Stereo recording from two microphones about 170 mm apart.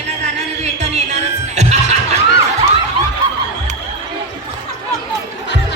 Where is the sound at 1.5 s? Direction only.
40° right (ahead or behind).